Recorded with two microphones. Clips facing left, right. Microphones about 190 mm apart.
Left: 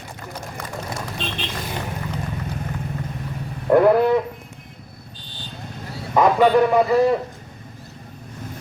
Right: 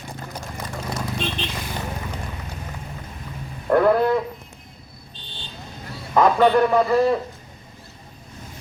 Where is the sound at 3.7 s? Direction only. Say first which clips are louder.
Left 3 dB; 10° left (ahead or behind).